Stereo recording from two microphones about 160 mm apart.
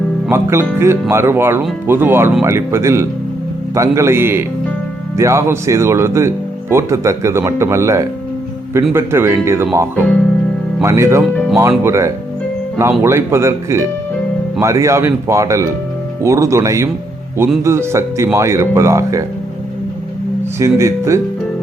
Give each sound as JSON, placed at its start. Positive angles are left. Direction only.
{"t": 0.3, "sound": "speech", "side_deg": -15}
{"t": 20.6, "sound": "speech", "side_deg": -20}